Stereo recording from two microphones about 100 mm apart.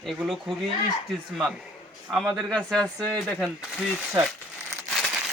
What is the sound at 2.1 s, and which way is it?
Speech, centre (ahead or behind).